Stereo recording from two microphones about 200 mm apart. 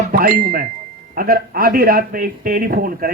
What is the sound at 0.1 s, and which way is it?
A man's voice, 45° right (ahead or behind).